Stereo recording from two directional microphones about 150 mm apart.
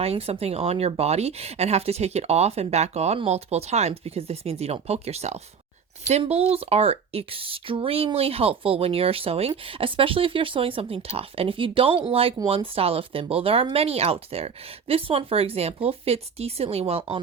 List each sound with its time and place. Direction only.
0.0 s speech: 40° right (ahead or behind)